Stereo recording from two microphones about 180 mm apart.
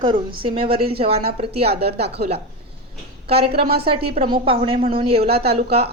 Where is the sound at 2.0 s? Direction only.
65° right (ahead or behind).